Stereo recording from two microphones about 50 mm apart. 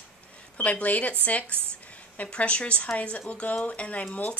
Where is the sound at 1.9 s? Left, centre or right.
Left.